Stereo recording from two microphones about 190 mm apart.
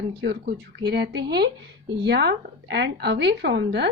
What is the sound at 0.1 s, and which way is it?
Speech, 60° right (ahead or behind).